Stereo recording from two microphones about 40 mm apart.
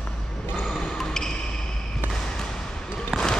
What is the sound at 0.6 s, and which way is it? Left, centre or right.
Basketball bounce, centre.